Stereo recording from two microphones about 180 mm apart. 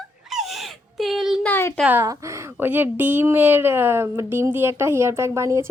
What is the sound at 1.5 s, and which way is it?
Speech, 15° left (ahead or behind).